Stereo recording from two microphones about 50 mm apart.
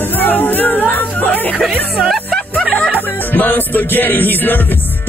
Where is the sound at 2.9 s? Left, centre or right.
Left.